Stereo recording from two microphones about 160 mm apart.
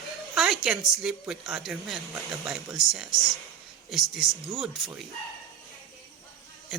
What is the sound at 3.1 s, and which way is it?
Speech, 20° left (ahead or behind).